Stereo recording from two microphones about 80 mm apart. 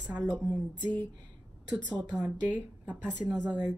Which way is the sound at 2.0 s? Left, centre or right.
Right.